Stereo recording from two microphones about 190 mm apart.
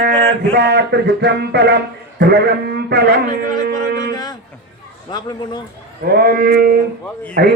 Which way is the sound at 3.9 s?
20° left (ahead or behind).